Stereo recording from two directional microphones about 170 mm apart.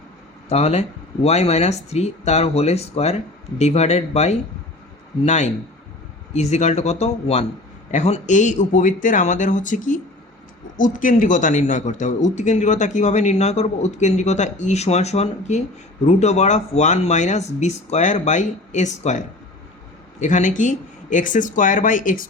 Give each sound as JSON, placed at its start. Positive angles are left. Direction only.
{"t": 0.4, "sound": "a man's voice", "side_deg": 40}